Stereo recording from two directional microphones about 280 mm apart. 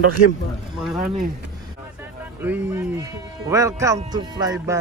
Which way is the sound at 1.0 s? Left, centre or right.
Right.